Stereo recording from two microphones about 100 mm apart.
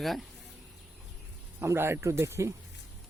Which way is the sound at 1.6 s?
25° right (ahead or behind).